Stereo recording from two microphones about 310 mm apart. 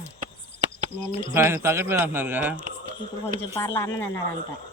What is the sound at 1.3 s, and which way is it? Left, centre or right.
A man's voice, centre.